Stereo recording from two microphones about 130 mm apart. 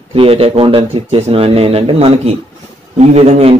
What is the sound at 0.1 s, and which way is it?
A man's voice, 45° right (ahead or behind).